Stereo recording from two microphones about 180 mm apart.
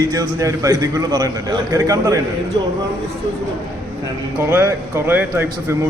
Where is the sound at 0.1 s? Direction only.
15° right (ahead or behind).